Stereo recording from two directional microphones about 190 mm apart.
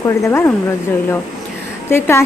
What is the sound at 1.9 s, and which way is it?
Speech, 15° left (ahead or behind).